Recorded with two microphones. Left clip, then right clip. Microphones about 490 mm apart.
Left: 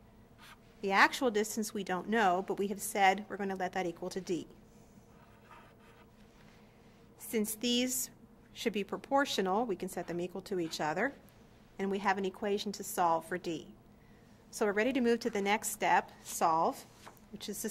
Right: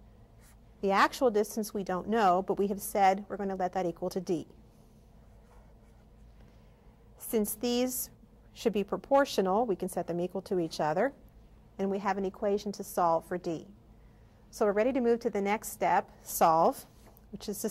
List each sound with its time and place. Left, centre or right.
0.7 s a woman's voice: right
7.2 s speech: right
8.5 s a woman's voice: right